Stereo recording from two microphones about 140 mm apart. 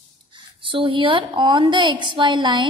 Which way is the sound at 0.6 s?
40° right (ahead or behind).